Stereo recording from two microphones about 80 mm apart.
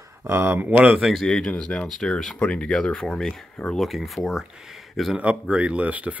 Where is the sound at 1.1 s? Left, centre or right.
Centre.